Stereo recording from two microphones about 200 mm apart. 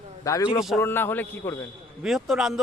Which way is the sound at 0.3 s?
15° left (ahead or behind).